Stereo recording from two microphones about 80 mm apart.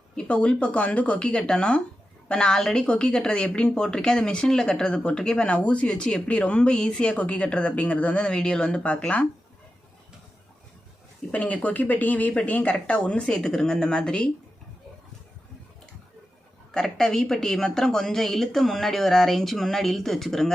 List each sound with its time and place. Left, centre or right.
0.2 s a woman's voice: centre
11.3 s a woman's voice: centre
16.7 s speech: centre